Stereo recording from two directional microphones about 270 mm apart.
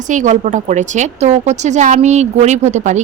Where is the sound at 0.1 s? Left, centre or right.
Right.